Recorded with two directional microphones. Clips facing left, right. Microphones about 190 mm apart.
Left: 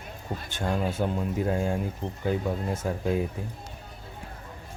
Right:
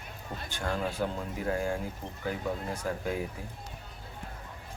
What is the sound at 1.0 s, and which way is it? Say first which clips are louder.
Speech: left 3 dB; 20° left (ahead or behind).